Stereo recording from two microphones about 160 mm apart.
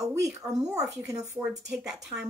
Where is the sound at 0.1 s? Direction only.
20° right (ahead or behind).